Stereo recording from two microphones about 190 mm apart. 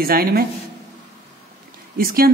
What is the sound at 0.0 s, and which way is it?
Speech, 50° right (ahead or behind).